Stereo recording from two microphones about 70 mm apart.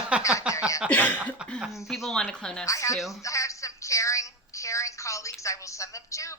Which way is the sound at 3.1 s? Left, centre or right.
Left.